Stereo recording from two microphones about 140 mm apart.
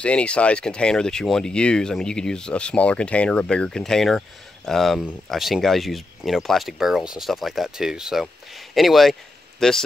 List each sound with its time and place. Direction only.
0.0 s a man's voice: 10° left (ahead or behind)